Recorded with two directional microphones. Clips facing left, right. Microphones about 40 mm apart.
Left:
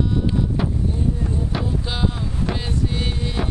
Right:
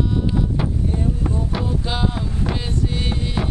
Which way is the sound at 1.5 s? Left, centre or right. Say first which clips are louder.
Right 1 dB; centre.